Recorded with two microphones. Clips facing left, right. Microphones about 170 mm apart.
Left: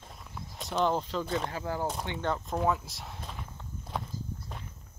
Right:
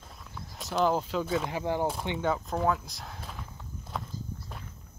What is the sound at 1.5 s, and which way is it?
Speech, 20° right (ahead or behind).